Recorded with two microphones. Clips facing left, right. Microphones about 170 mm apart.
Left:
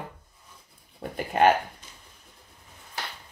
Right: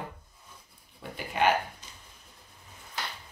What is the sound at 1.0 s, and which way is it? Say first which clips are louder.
Speech: left 6 dB; 45° left (ahead or behind).